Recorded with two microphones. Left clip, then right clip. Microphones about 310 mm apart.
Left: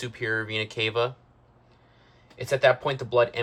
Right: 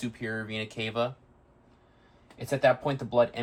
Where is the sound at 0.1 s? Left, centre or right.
Left.